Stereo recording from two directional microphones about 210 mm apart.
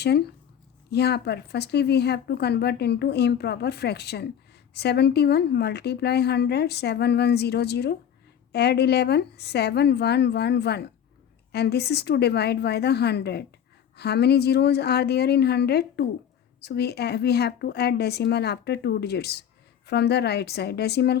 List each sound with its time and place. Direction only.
0.9 s speech: 50° left (ahead or behind)